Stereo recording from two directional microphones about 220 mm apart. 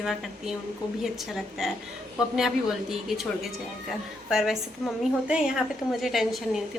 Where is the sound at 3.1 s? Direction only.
Centre (ahead or behind).